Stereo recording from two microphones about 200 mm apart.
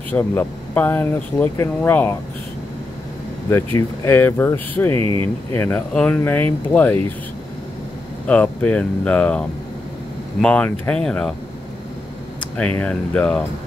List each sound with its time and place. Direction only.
0.1 s speech: 10° left (ahead or behind)
3.4 s speech: 10° left (ahead or behind)
4.9 s speech: 25° right (ahead or behind)
5.5 s speech: 10° left (ahead or behind)
8.3 s speech: 5° left (ahead or behind)
12.5 s speech: 5° left (ahead or behind)